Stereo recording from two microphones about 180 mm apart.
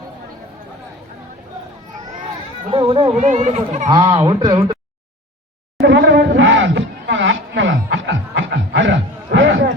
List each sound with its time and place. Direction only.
2.6 s speech: 30° right (ahead or behind)
3.8 s speech: 25° right (ahead or behind)
5.8 s a sound: 80° right